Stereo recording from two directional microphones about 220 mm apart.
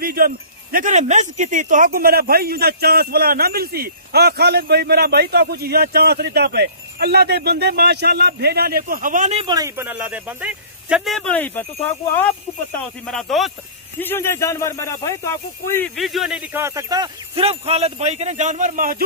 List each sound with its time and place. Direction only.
0.0 s speech: 40° right (ahead or behind); by 11.6 s 5° left (ahead or behind)
12.7 s speech: 5° left (ahead or behind)
16.0 s speech: centre (ahead or behind); by 19.0 s 40° right (ahead or behind)